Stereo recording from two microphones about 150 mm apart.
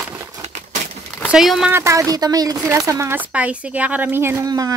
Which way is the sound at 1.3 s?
Centre (ahead or behind).